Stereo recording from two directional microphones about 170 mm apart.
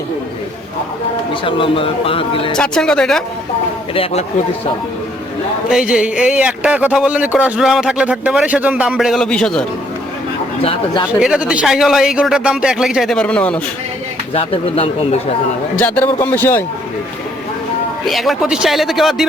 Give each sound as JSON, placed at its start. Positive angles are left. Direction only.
{"t": 1.3, "sound": "speech", "side_deg": 30}
{"t": 2.6, "sound": "speech", "side_deg": 5}
{"t": 3.9, "sound": "speech", "side_deg": 35}
{"t": 5.6, "sound": "speech", "side_deg": -5}
{"t": 10.6, "sound": "speech", "side_deg": 35}
{"t": 11.2, "sound": "speech", "side_deg": -5}
{"t": 14.3, "sound": "speech", "side_deg": 35}
{"t": 16.2, "sound": "a man's voice", "side_deg": 10}
{"t": 18.0, "sound": "speech", "side_deg": 0}